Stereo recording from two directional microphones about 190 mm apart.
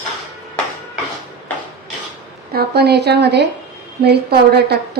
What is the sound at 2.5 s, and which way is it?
Speech, 60° right (ahead or behind).